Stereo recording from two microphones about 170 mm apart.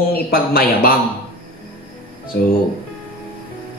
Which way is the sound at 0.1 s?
60° left (ahead or behind).